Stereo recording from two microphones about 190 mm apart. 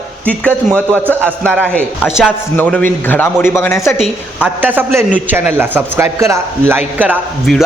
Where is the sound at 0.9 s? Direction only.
10° right (ahead or behind).